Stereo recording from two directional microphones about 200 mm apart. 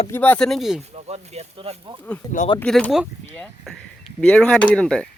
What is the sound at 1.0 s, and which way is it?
Speech, 30° right (ahead or behind).